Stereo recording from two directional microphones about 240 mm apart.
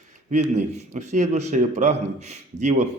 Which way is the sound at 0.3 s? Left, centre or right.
Right.